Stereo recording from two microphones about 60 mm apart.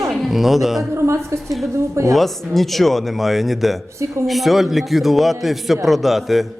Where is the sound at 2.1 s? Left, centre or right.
Centre.